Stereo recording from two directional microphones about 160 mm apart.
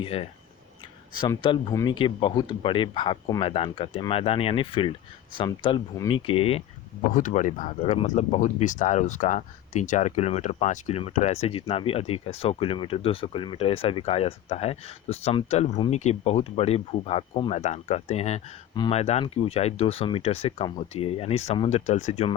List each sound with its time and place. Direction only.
0.0 s speech: 35° left (ahead or behind)
1.4 s speech: 25° left (ahead or behind)
7.1 s speech: 55° left (ahead or behind)
18.7 s speech: 30° left (ahead or behind)
18.9 s speech: 40° left (ahead or behind)